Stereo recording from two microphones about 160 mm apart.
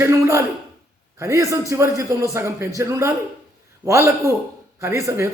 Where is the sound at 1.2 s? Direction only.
20° right (ahead or behind).